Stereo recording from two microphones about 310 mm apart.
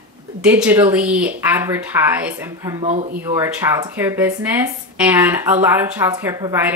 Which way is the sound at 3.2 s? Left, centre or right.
Centre.